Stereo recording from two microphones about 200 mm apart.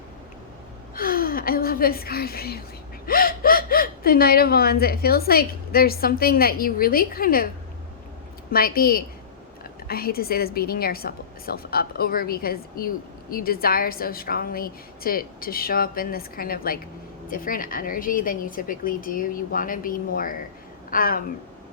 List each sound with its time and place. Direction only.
0.9 s a woman's voice: 45° left (ahead or behind)
8.5 s speech: 50° left (ahead or behind)